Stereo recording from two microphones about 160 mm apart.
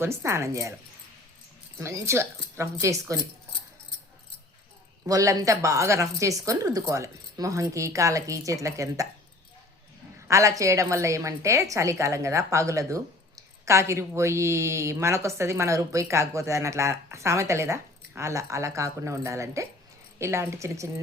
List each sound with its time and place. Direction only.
0.0 s speech: 15° right (ahead or behind)
1.8 s speech: 15° right (ahead or behind)
5.0 s a woman's voice: 20° right (ahead or behind)
10.2 s a woman's voice: 20° right (ahead or behind)